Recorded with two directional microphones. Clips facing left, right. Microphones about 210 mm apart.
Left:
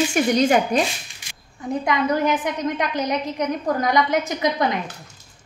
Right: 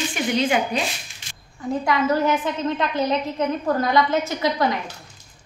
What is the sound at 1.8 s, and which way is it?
A woman's voice, 20° left (ahead or behind).